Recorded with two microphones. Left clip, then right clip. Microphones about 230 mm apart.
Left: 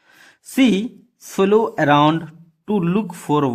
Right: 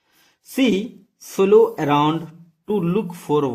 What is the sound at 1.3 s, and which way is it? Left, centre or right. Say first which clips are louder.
A man's voice: right 2 dB; left.